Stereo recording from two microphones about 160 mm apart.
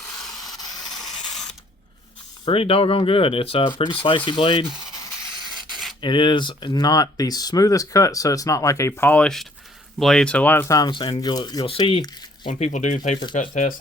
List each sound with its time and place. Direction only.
0.2 s a sound: centre (ahead or behind)
0.4 s a sound: 25° left (ahead or behind)
0.9 s printer: centre (ahead or behind)
2.4 s speech: 35° left (ahead or behind)
6.0 s speech: 30° left (ahead or behind)
12.5 s speech: 50° left (ahead or behind)